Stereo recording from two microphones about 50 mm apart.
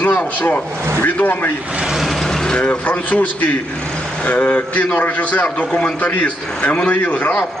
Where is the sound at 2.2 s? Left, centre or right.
Centre.